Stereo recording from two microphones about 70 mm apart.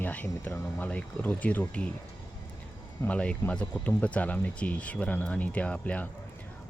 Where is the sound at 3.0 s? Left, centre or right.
Centre.